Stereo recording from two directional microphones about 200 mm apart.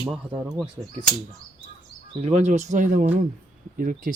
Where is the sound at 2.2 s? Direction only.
35° right (ahead or behind).